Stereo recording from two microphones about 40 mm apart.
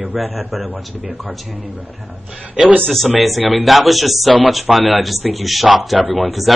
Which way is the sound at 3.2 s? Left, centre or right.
Centre.